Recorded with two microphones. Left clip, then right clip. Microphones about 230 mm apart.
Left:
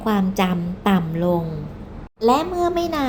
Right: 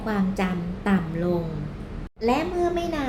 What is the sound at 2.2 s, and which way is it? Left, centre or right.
Speech, left.